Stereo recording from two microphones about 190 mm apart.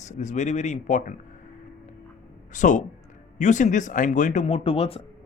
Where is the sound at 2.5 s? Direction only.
40° left (ahead or behind).